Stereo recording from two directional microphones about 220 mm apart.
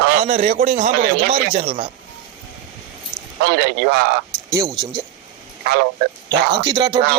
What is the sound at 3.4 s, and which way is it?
Speech, 45° right (ahead or behind).